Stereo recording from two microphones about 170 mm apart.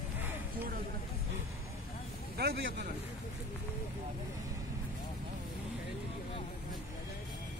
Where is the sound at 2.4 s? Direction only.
80° right.